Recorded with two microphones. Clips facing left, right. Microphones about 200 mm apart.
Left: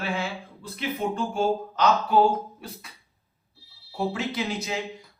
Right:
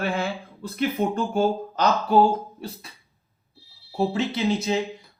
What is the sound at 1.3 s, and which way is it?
Speech, 45° right (ahead or behind).